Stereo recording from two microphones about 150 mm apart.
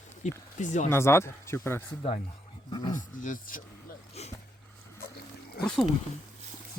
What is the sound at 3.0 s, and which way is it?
Speech, 60° left (ahead or behind).